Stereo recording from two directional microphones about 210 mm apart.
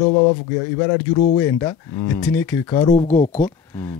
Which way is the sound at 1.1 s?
30° left (ahead or behind).